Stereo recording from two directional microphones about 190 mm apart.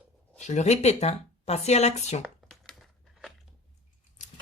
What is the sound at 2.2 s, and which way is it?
Crumpling, centre (ahead or behind).